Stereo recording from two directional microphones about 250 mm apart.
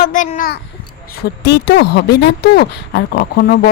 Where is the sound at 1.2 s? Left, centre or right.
Left.